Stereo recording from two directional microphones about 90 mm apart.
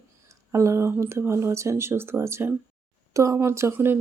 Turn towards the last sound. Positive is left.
turn(degrees=-25)  # may be behind; listen again after turning